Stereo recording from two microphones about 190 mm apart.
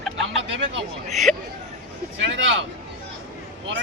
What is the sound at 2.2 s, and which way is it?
Speech, 75° right (ahead or behind).